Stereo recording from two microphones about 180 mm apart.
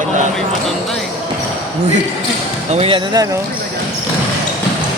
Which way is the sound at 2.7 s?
30° right (ahead or behind).